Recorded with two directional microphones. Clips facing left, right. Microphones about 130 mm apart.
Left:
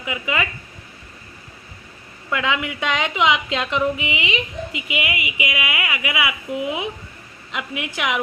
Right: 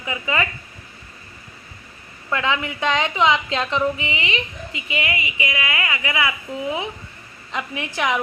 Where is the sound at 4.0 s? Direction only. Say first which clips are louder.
Left 1 dB; 35° right (ahead or behind).